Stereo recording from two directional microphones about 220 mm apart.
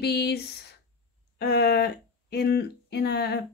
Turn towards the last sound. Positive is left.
turn(degrees=50)  # may be behind; listen again after turning